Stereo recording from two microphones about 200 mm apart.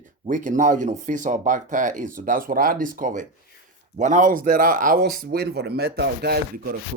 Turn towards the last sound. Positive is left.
turn(degrees=-50)  # may be behind; listen again after turning